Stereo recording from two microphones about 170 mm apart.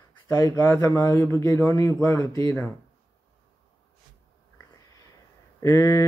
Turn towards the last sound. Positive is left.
turn(degrees=15)  # may be behind; listen again after turning